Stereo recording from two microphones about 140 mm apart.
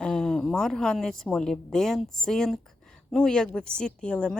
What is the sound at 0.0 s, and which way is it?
A woman's voice, 5° left (ahead or behind).